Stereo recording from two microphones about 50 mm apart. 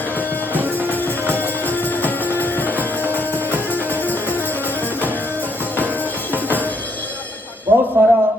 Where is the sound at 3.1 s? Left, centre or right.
Right.